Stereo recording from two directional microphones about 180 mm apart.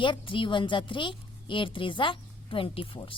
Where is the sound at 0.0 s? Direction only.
25° left (ahead or behind).